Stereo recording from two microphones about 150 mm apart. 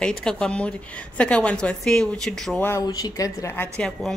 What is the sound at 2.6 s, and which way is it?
Speech, 20° left (ahead or behind).